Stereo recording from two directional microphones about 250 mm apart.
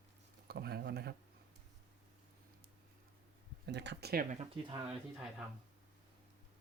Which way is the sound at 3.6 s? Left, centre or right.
Right.